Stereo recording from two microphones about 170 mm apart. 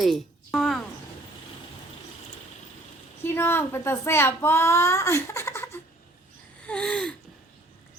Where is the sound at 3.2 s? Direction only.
15° left (ahead or behind).